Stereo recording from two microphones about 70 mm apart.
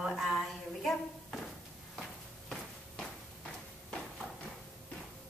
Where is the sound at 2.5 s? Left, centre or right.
Centre.